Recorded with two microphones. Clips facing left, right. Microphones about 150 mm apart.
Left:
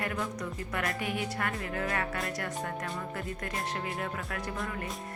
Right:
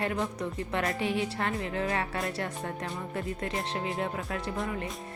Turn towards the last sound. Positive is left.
turn(degrees=-20)  # may be behind; listen again after turning